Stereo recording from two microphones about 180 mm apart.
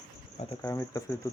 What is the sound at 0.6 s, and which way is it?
Cricket, 15° left (ahead or behind).